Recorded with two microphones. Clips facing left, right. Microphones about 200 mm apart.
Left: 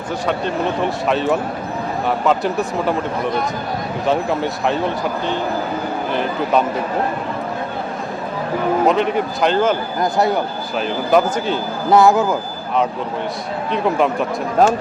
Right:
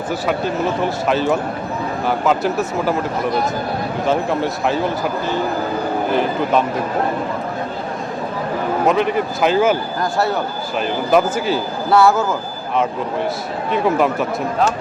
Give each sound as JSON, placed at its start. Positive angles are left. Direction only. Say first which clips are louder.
{"t": 0.3, "sound": "speech", "louder": "even", "side_deg": -5}
{"t": 4.0, "sound": "speech", "louder": "even", "side_deg": 0}
{"t": 6.1, "sound": "speech", "louder": "right 1 dB", "side_deg": 0}
{"t": 8.9, "sound": "speech", "louder": "even", "side_deg": 0}
{"t": 10.0, "sound": "speech", "louder": "left 2 dB", "side_deg": 15}
{"t": 10.8, "sound": "speech", "louder": "even", "side_deg": 0}
{"t": 11.9, "sound": "speech", "louder": "left 2 dB", "side_deg": 15}
{"t": 13.7, "sound": "speech", "louder": "right 1 dB", "side_deg": 0}
{"t": 14.6, "sound": "speech", "louder": "left 5 dB", "side_deg": 45}